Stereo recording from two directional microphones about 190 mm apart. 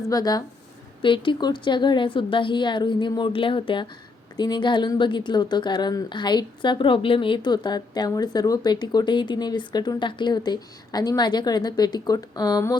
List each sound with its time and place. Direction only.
0.1 s a woman's voice: 20° left (ahead or behind)